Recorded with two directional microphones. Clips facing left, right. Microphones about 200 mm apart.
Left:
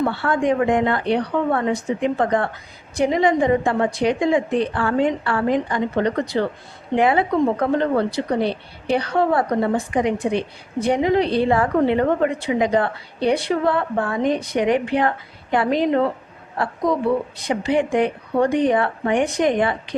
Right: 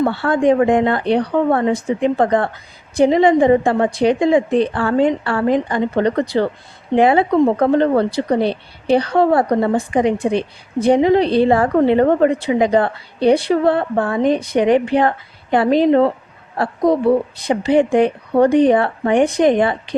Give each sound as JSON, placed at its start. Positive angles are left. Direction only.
{"t": 0.0, "sound": "speech", "side_deg": -30}